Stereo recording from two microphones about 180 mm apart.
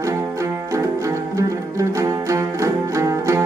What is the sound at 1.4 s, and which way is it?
Music, 15° right (ahead or behind).